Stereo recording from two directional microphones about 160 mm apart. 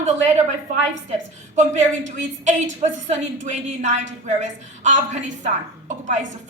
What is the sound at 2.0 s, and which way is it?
A woman's voice, 50° right (ahead or behind).